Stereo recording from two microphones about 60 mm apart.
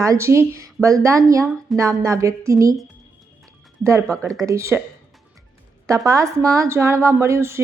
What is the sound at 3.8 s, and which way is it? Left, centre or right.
Speech, right.